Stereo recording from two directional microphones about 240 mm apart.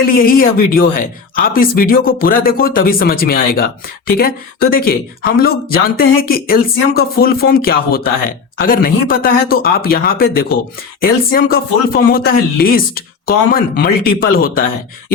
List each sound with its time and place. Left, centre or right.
0.1 s speech: left